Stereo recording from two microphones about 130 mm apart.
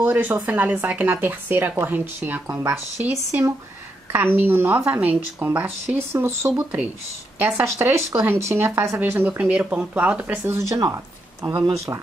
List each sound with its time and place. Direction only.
0.0 s speech: 15° right (ahead or behind)